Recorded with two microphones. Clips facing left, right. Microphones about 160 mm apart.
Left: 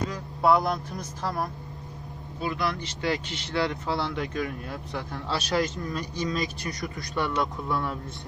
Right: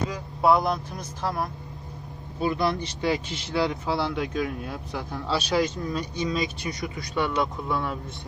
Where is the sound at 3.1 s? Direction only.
10° right (ahead or behind).